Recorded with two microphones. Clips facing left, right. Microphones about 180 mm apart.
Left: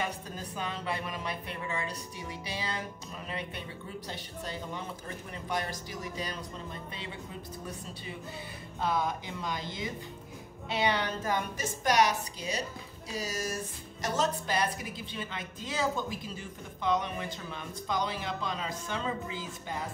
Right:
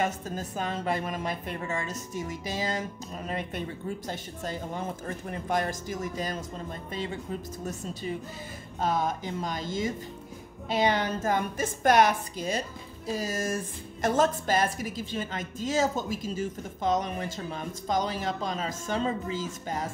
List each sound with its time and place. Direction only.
0.0 s a woman's voice: 45° right (ahead or behind)